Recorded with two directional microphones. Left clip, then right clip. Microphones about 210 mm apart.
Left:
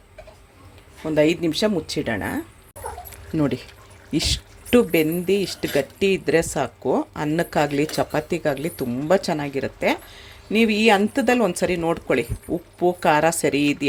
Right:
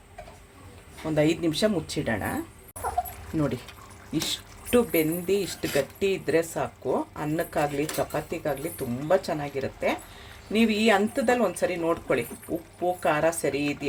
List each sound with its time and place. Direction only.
1.1 s speech: 20° left (ahead or behind)